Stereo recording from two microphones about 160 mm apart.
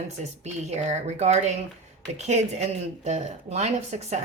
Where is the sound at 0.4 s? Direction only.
45° right (ahead or behind).